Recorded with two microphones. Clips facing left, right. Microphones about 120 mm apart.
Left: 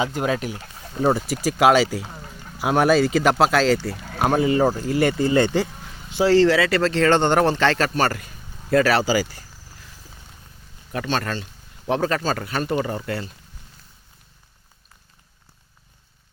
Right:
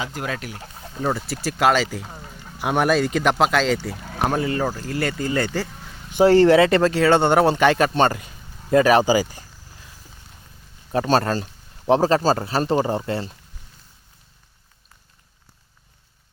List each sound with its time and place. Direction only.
0.0 s speech: 20° left (ahead or behind)
1.3 s speech: 10° left (ahead or behind)
3.9 s a sound: 15° right (ahead or behind)
4.2 s speech: 10° left (ahead or behind)
6.2 s speech: 20° right (ahead or behind)
6.9 s speech: 10° right (ahead or behind)
10.9 s speech: 35° right (ahead or behind)